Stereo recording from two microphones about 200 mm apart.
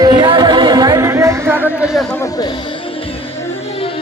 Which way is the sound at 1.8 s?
Centre (ahead or behind).